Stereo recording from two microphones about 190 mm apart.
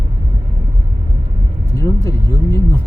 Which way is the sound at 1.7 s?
15° left (ahead or behind).